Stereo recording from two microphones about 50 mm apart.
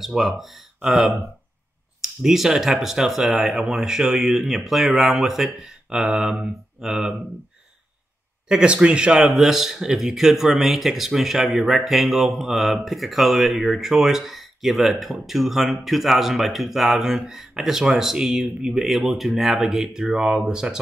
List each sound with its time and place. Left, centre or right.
0.0 s speech: centre
2.0 s speech: centre
8.5 s speech: centre